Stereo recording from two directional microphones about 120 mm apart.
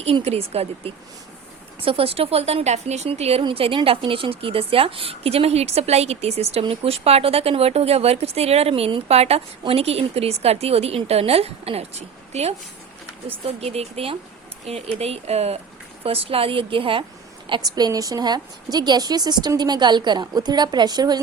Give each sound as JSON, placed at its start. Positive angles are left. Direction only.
{"t": 0.0, "sound": "a woman's voice", "side_deg": -60}
{"t": 17.5, "sound": "a woman's voice", "side_deg": -35}